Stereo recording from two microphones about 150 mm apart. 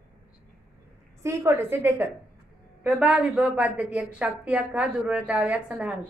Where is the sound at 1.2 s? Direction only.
20° right (ahead or behind).